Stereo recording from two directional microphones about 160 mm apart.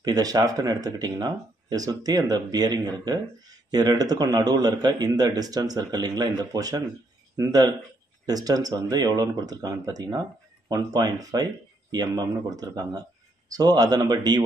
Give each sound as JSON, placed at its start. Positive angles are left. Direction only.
{"t": 0.0, "sound": "speech", "side_deg": -25}